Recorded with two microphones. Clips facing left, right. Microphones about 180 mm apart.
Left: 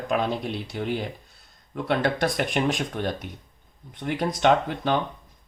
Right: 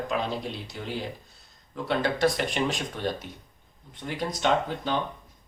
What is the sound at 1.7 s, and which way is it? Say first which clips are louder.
Speech: left 3 dB; 55° left (ahead or behind).